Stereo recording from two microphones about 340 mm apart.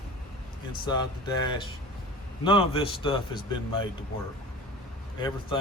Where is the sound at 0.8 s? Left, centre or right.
Centre.